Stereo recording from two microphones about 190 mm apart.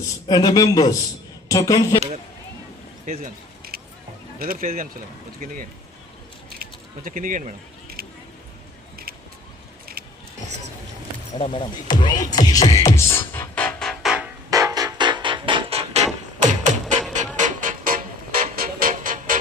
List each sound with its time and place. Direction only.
0.3 s speech: 20° left (ahead or behind)
3.1 s speech: 35° right (ahead or behind)
3.6 s a sound: 55° right (ahead or behind)
4.4 s speech: 50° right (ahead or behind)
6.6 s speech: 45° right (ahead or behind)
8.0 s single-lens reflex camera: 50° right (ahead or behind)
9.9 s keys jangling: 50° right (ahead or behind)
11.3 s speech: 30° left (ahead or behind)
12.5 s music: 20° left (ahead or behind); by 14.3 s centre (ahead or behind)
14.5 s music: 20° right (ahead or behind)
16.8 s music: centre (ahead or behind)
17.4 s music: 45° right (ahead or behind)